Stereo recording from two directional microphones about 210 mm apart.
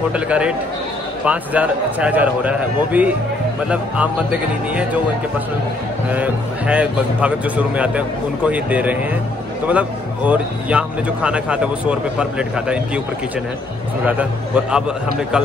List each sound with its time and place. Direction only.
0.1 s speech: 5° right (ahead or behind)
6.0 s speech: 5° right (ahead or behind)
14.0 s speech: 5° right (ahead or behind)